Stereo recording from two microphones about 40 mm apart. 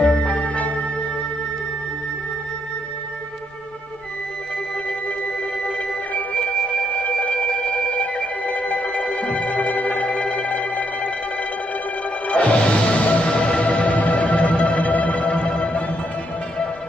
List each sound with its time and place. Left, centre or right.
0.0 s music: left
5.6 s music: left
12.3 s music: left
13.7 s music: left